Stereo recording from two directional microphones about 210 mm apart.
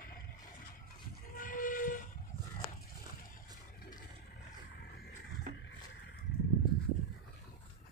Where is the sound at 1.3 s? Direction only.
40° left (ahead or behind).